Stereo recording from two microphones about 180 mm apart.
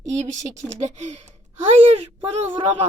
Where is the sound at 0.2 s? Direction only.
40° right (ahead or behind).